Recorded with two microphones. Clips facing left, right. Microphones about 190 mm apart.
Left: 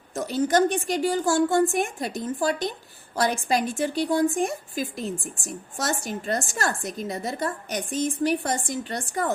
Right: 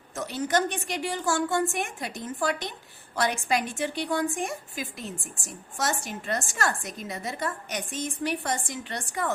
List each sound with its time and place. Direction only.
0.1 s a woman's voice: 35° left (ahead or behind)